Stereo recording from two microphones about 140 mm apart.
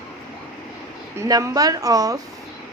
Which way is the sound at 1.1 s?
25° right (ahead or behind).